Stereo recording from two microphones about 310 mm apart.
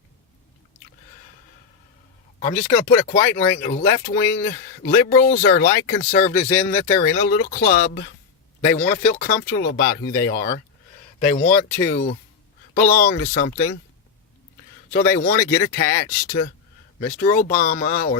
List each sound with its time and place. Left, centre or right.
2.4 s speech: left
6.4 s speech: centre
7.0 s speech: left
14.9 s speech: left